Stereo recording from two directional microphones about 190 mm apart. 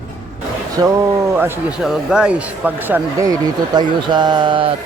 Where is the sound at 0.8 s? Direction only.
15° right (ahead or behind).